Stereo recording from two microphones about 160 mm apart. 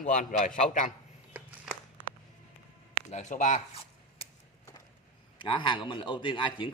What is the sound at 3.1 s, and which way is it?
Speech, 50° left (ahead or behind).